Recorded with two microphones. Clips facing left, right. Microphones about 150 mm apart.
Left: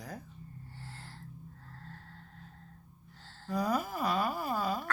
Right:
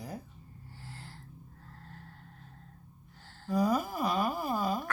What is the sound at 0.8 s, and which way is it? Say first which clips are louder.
Gasp: right 3 dB; 15° right (ahead or behind).